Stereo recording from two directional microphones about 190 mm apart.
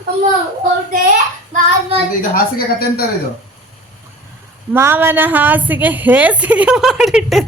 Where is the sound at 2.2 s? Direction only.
50° left (ahead or behind).